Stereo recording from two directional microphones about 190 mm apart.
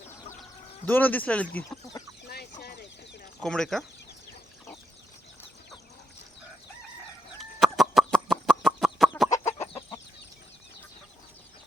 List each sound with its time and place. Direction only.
0.9 s speech: 10° left (ahead or behind)
2.2 s a sound: 55° left (ahead or behind)
3.4 s speech: 5° left (ahead or behind)
7.3 s fowl: centre (ahead or behind)
9.6 s chicken: 15° left (ahead or behind)